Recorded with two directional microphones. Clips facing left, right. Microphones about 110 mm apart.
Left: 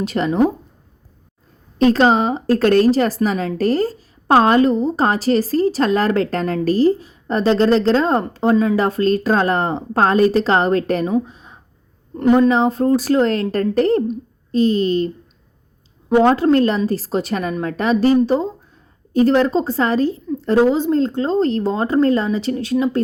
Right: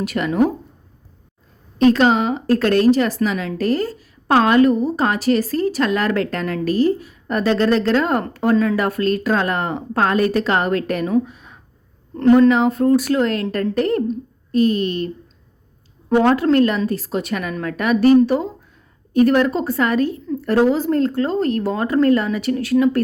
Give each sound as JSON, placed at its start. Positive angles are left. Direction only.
{"t": 0.0, "sound": "a woman's voice", "side_deg": 30}
{"t": 1.8, "sound": "speech", "side_deg": 35}
{"t": 11.3, "sound": "a sound", "side_deg": 30}
{"t": 12.1, "sound": "speech", "side_deg": 15}
{"t": 12.5, "sound": "a woman's voice", "side_deg": 30}
{"t": 16.0, "sound": "a woman's voice", "side_deg": 20}
{"t": 16.3, "sound": "a woman's voice", "side_deg": 30}